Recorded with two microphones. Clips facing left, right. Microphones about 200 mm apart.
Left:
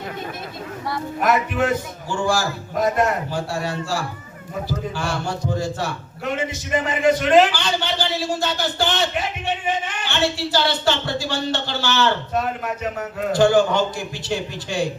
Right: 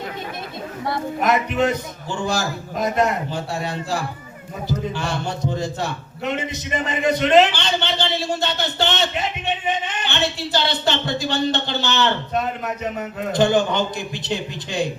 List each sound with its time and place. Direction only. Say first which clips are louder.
0.9 s a man's voice: even; 20° right (ahead or behind)
3.6 s a man's voice: left 1 dB; 20° right (ahead or behind)
4.9 s a man's voice: even; 20° right (ahead or behind)